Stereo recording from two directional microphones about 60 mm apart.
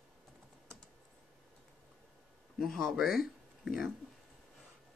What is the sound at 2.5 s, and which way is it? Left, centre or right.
Speech, centre.